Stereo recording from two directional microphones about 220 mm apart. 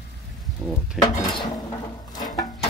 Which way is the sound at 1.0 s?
20° left (ahead or behind).